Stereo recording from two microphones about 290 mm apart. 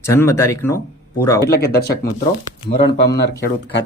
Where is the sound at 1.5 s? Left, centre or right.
Left.